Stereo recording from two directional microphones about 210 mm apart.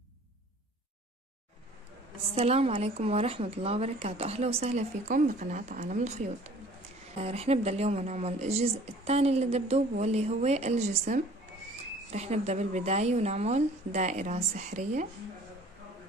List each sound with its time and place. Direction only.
2.3 s a woman's voice: 30° right (ahead or behind)